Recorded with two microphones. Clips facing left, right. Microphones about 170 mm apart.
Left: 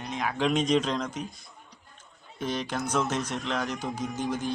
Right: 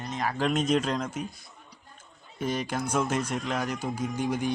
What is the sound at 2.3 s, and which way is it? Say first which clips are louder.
Speech: right 1 dB; 10° right (ahead or behind).